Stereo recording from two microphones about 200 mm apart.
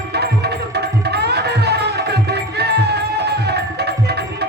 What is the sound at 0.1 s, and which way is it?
Music, 55° right (ahead or behind).